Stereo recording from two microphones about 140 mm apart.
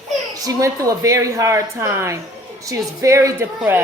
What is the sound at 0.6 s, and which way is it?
A woman's voice, 25° right (ahead or behind).